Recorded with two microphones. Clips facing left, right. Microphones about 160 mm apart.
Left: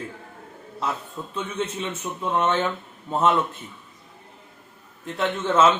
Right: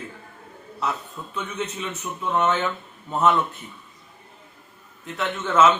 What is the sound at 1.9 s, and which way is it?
Speech, 10° left (ahead or behind).